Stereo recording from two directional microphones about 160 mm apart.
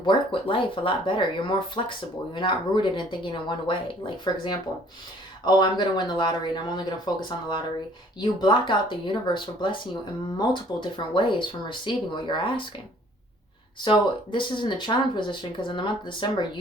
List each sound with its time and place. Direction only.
0.0 s speech: 30° left (ahead or behind)
13.8 s speech: 30° left (ahead or behind)